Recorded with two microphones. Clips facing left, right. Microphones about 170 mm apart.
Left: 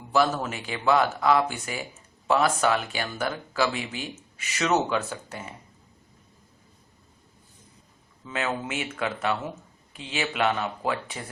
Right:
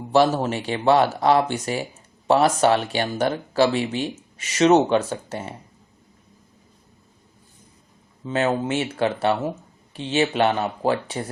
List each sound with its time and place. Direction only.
0.1 s speech: 30° right (ahead or behind)
8.2 s speech: 35° right (ahead or behind)